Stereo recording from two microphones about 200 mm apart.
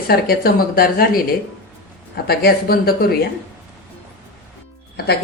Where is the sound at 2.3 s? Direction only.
50° left (ahead or behind).